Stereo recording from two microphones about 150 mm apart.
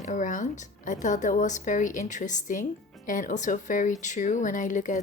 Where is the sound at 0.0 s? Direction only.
55° left (ahead or behind).